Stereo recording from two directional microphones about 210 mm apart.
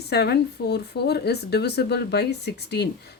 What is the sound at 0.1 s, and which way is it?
Speech, 50° left (ahead or behind).